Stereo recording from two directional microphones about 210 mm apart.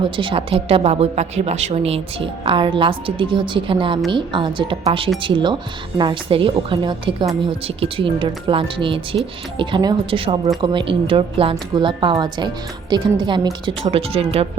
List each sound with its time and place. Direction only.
0.2 s a woman's voice: 25° right (ahead or behind)